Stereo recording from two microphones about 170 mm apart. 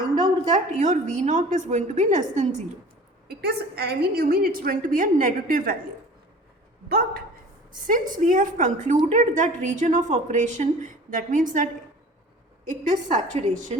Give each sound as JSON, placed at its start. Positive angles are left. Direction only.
{"t": 0.5, "sound": "a woman's voice", "side_deg": -45}
{"t": 3.2, "sound": "a woman's voice", "side_deg": -70}
{"t": 6.8, "sound": "a woman's voice", "side_deg": -65}
{"t": 7.9, "sound": "a woman's voice", "side_deg": -50}
{"t": 12.9, "sound": "a woman's voice", "side_deg": -45}